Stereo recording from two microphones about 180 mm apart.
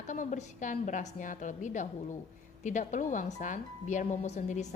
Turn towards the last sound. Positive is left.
turn(degrees=40)  # may be behind; listen again after turning